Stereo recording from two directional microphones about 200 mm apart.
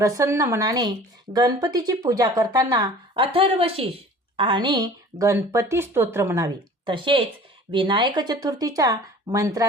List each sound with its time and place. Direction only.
0.0 s speech: 15° right (ahead or behind)